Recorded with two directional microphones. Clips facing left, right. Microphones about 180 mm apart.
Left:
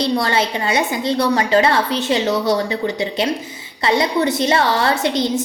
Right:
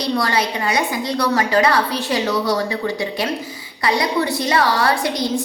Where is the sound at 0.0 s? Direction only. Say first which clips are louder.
Left 2 dB; 25° left (ahead or behind).